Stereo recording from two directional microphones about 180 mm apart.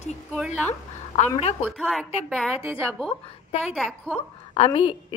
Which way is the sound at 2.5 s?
30° left (ahead or behind).